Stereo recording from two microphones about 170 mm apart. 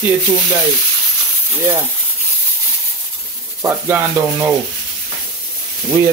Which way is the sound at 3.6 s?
10° right (ahead or behind).